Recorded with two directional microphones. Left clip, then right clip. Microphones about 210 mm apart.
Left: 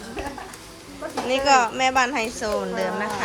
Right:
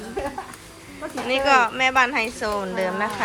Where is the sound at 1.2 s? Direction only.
10° left (ahead or behind).